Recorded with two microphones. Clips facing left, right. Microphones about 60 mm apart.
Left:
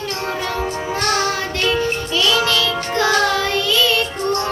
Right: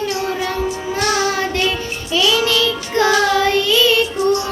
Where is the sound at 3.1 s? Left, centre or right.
Left.